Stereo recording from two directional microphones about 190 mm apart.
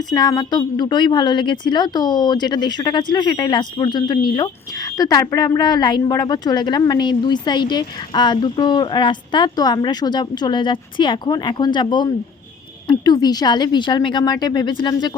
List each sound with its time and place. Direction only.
0.0 s speech: 20° left (ahead or behind)